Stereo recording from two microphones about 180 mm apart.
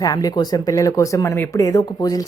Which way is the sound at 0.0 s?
20° left (ahead or behind).